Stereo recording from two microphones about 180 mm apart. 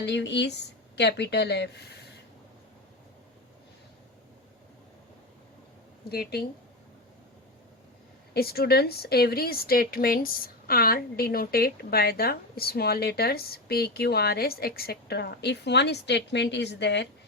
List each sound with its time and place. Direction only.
0.0 s speech: 75° left (ahead or behind)
6.1 s a woman's voice: 60° left (ahead or behind)
8.3 s a woman's voice: 60° left (ahead or behind)